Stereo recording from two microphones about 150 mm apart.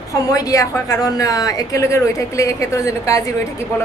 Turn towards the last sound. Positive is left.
turn(degrees=20)  # may be behind; listen again after turning